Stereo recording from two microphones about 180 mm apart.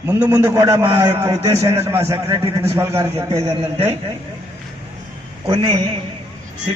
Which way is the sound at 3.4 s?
35° right (ahead or behind).